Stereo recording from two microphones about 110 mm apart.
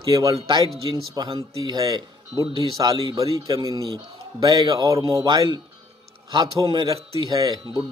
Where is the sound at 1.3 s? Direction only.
35° right (ahead or behind).